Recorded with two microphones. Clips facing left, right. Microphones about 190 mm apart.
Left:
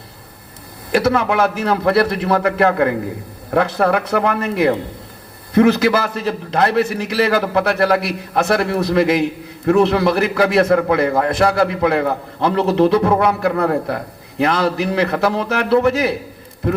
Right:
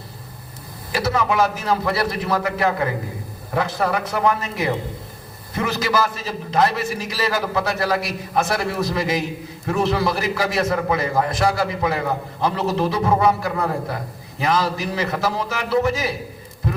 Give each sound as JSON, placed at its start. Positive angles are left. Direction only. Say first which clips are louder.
{"t": 0.9, "sound": "a man's voice", "louder": "left 5 dB", "side_deg": 60}